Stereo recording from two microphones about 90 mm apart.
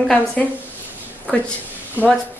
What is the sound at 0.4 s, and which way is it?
Speech, 10° left (ahead or behind).